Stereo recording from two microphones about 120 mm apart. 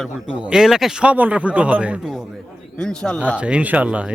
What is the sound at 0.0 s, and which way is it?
Speech, 5° right (ahead or behind).